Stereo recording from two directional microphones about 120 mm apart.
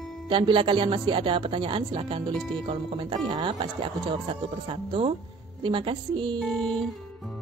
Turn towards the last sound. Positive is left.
turn(degrees=5)  # may be behind; listen again after turning